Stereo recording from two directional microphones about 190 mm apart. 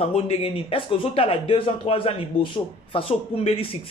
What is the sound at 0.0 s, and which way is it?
Speech, 30° left (ahead or behind).